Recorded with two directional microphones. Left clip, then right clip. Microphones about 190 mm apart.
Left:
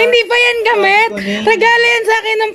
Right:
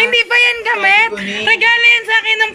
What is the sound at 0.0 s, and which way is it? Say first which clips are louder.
Speech: left 1 dB; 20° left (ahead or behind).